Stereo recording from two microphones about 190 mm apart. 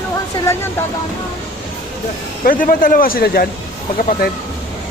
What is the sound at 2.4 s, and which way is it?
Speech, 45° left (ahead or behind).